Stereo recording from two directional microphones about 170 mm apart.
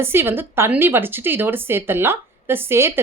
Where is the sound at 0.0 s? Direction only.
15° right (ahead or behind).